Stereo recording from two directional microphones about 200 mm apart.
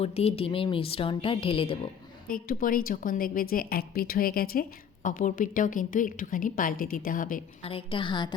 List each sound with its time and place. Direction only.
0.0 s a woman's voice: 30° left (ahead or behind)
2.3 s a woman's voice: 45° left (ahead or behind)
7.6 s a woman's voice: 30° left (ahead or behind)